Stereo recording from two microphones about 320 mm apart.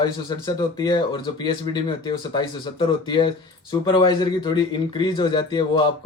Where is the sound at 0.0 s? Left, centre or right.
Centre.